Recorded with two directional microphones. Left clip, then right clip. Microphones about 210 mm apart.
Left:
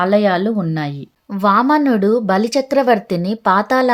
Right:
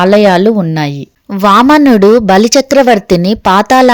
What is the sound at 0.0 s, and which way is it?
Speech, 35° right (ahead or behind).